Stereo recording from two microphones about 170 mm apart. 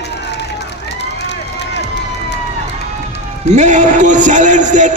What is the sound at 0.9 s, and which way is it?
Run, 90° left.